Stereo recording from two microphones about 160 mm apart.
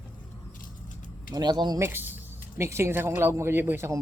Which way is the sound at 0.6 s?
55° left (ahead or behind).